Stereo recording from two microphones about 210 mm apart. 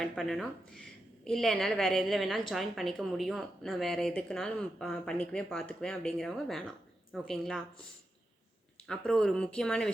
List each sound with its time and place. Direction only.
0.0 s speech: centre (ahead or behind)
8.9 s speech: 5° left (ahead or behind)